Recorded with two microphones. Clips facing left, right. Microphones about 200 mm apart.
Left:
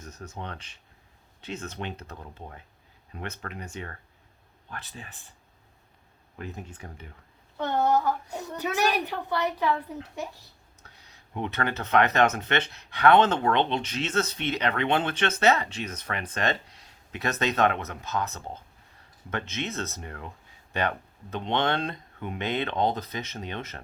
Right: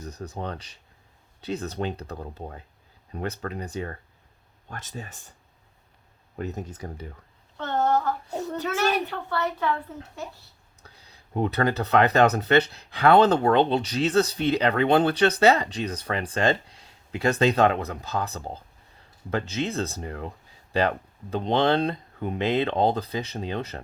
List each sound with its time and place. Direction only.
0.0 s speech: 35° right (ahead or behind)
6.4 s speech: 40° right (ahead or behind)
7.6 s a child's voice: 15° left (ahead or behind)
10.8 s speech: 35° right (ahead or behind)